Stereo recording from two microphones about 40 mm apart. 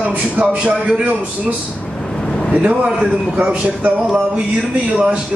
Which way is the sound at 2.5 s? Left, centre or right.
Right.